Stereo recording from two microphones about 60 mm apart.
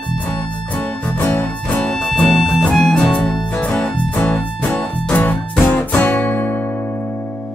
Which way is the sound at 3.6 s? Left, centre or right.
Left.